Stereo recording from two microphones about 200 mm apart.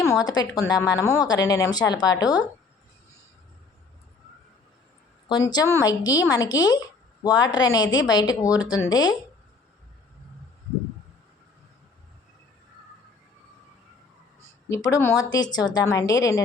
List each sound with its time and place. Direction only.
0.0 s a woman's voice: 15° left (ahead or behind)
5.5 s a woman's voice: 20° left (ahead or behind)
14.7 s a woman's voice: 15° left (ahead or behind)